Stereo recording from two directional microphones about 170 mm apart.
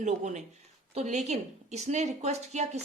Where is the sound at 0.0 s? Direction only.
45° right (ahead or behind).